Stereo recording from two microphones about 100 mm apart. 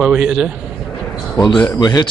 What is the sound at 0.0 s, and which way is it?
Speech, 5° right (ahead or behind).